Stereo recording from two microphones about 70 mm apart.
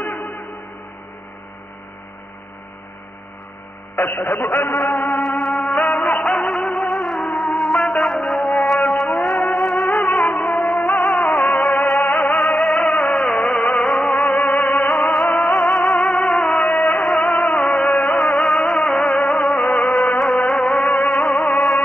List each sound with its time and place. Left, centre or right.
4.6 s a man's voice: left
5.2 s music: centre